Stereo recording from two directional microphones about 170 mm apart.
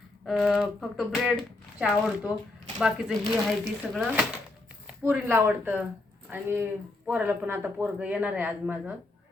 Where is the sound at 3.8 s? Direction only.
5° left (ahead or behind).